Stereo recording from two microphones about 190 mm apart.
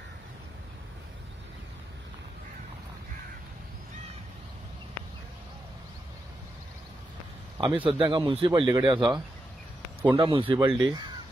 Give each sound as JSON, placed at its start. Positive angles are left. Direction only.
{"t": 7.5, "sound": "speech", "side_deg": -25}
{"t": 10.1, "sound": "speech", "side_deg": -25}